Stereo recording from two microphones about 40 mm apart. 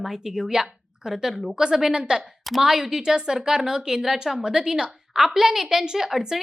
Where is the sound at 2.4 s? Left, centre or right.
Centre.